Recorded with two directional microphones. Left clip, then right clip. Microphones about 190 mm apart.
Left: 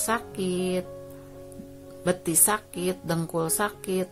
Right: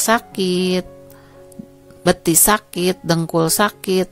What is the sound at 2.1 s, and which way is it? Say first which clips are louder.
Speech: right 10 dB; 45° right (ahead or behind).